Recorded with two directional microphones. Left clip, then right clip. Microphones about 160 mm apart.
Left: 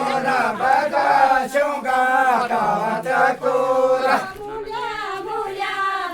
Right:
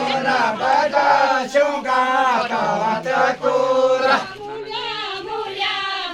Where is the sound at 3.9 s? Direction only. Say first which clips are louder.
Right 1 dB; 60° left (ahead or behind).